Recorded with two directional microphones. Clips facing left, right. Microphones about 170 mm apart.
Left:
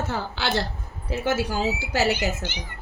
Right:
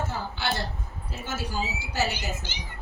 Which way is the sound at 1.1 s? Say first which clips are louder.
Left 9 dB; 80° left.